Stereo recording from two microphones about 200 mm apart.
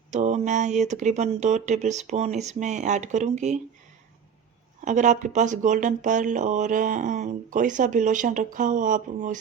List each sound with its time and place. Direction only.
0.1 s speech: 35° right (ahead or behind)
4.9 s speech: 40° right (ahead or behind)